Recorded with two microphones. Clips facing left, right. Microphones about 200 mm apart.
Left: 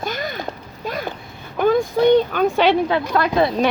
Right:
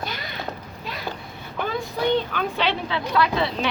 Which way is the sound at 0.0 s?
45° left (ahead or behind).